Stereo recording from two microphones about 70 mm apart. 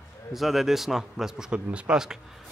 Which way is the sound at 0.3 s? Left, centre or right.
Centre.